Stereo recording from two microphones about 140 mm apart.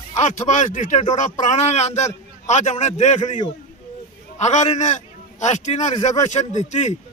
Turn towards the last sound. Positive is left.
turn(degrees=55)  # may be behind; listen again after turning